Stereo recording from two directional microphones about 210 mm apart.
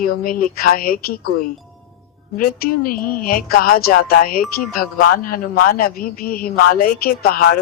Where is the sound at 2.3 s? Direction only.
40° left (ahead or behind).